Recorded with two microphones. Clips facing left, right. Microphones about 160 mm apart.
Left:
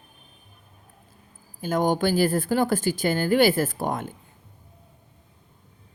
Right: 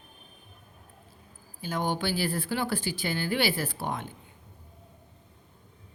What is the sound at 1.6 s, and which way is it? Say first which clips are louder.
A woman's voice: left 7 dB; 45° left (ahead or behind).